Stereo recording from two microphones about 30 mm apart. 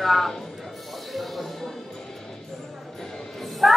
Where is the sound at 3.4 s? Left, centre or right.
Centre.